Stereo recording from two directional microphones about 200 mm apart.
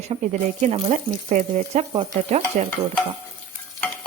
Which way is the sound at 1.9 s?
25° right (ahead or behind).